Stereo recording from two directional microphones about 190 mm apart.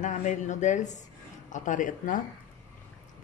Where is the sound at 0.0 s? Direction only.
40° left (ahead or behind).